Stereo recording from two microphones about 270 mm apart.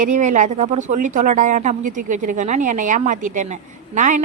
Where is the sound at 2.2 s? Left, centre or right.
Right.